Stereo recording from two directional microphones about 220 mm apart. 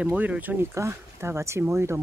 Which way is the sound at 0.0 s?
5° right (ahead or behind).